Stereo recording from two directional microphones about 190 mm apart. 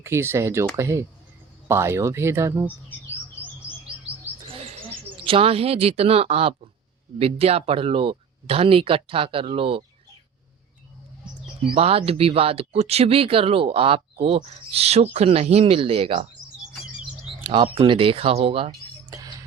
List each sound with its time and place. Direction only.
0.0 s speech: 15° right (ahead or behind)
3.6 s chirp: 70° left (ahead or behind)
4.4 s bird: 30° right (ahead or behind)
5.2 s speech: 30° right (ahead or behind)
11.6 s speech: 30° right (ahead or behind)
17.4 s speech: 25° right (ahead or behind)
19.1 s bird: 20° right (ahead or behind)